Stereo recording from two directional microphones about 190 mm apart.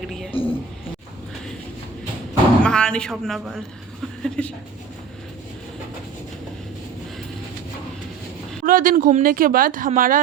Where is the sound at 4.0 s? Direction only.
5° left (ahead or behind).